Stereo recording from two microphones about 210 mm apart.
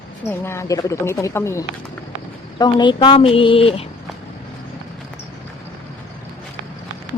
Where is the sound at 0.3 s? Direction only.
10° left (ahead or behind); by 3.8 s 25° left (ahead or behind).